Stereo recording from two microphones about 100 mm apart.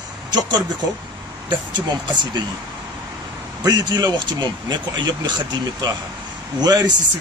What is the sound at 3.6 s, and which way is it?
A man's voice, 40° right (ahead or behind).